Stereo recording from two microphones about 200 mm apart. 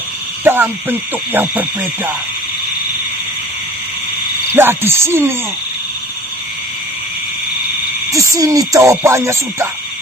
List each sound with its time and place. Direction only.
0.4 s speech: 10° right (ahead or behind)
4.5 s speech: 10° right (ahead or behind)
8.1 s speech: 15° right (ahead or behind)